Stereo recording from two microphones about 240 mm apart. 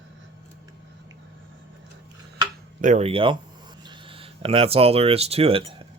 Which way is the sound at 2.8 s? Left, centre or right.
Right.